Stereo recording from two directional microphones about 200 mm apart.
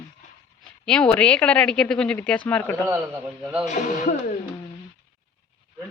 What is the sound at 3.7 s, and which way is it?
Speech, 40° left (ahead or behind).